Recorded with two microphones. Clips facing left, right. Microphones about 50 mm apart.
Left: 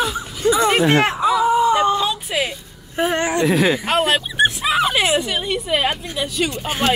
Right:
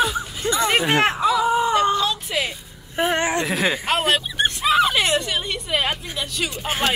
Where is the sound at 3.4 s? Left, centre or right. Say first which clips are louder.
Left 5 dB; centre.